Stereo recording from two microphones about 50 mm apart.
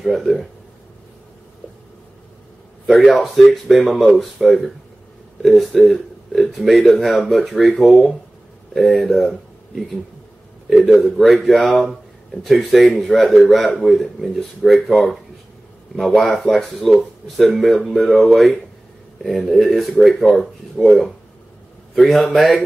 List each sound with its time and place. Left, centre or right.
0.0 s speech: centre
2.9 s speech: centre
11.1 s speech: centre
20.7 s speech: left
21.9 s speech: centre